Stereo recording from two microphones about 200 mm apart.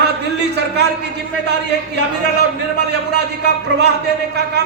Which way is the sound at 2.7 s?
55° right (ahead or behind).